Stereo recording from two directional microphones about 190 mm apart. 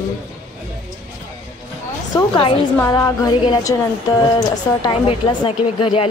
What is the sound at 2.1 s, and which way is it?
A woman's voice, 25° left (ahead or behind).